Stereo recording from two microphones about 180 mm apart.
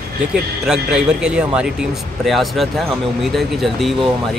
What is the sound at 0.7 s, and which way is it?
A man's voice, 5° right (ahead or behind).